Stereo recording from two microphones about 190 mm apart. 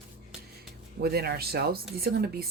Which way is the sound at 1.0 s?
55° right (ahead or behind).